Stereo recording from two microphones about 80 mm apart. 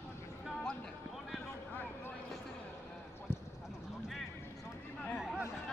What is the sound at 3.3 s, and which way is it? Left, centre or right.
Clip-clop, left.